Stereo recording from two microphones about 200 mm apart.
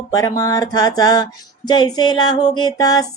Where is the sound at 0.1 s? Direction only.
20° left (ahead or behind).